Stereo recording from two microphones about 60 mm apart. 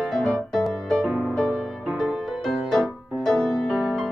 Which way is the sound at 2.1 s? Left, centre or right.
Centre.